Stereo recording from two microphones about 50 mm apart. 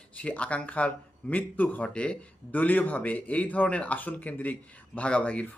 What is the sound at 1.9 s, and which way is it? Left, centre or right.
Speech, centre.